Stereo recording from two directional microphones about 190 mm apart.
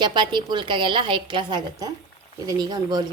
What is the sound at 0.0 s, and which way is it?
A woman's voice, 25° right (ahead or behind).